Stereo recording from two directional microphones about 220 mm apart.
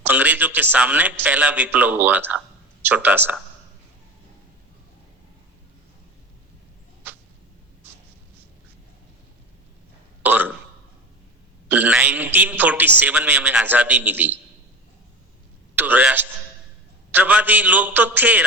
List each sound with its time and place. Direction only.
0.0 s a man's voice: 5° right (ahead or behind)
10.2 s burping: 10° right (ahead or behind)
11.7 s a man's voice: 5° right (ahead or behind)
15.8 s a man's voice: 5° right (ahead or behind)